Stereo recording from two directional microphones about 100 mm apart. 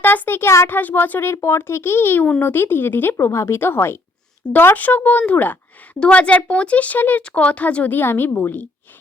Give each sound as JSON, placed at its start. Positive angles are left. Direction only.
{"t": 0.0, "sound": "a woman's voice", "side_deg": 20}